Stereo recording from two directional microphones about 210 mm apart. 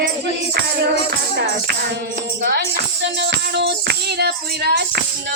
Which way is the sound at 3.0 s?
55° right (ahead or behind).